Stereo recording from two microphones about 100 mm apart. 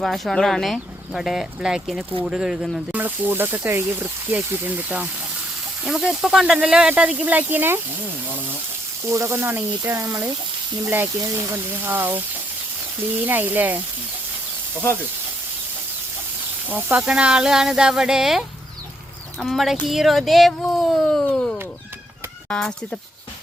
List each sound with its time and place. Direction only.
0.0 s speech: centre (ahead or behind)
2.9 s speech: 20° right (ahead or behind)
5.8 s speech: 5° right (ahead or behind)
9.1 s speech: 25° right (ahead or behind)
13.2 s speech: 15° right (ahead or behind)
16.6 s speech: 15° right (ahead or behind); by 21.2 s centre (ahead or behind)
21.2 s a sound: 10° left (ahead or behind)
22.4 s speech: 10° left (ahead or behind)